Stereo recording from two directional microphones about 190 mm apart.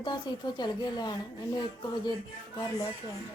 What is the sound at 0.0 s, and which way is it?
Speech, 25° left (ahead or behind).